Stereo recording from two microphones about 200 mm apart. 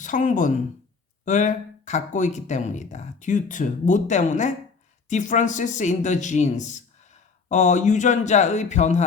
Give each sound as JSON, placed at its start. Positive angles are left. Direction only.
{"t": 0.0, "sound": "speech", "side_deg": 40}